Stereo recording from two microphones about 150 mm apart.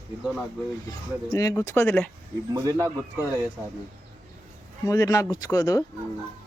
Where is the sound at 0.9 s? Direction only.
25° left (ahead or behind).